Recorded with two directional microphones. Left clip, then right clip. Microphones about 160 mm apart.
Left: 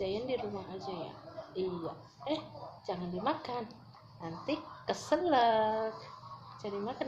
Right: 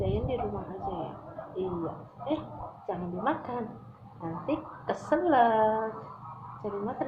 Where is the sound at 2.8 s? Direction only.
30° left (ahead or behind).